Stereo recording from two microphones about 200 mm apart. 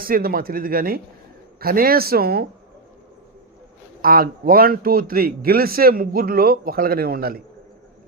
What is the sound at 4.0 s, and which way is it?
Speech, 45° right (ahead or behind).